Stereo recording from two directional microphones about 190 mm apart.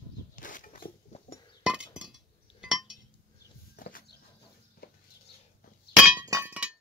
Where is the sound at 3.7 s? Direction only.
50° left (ahead or behind).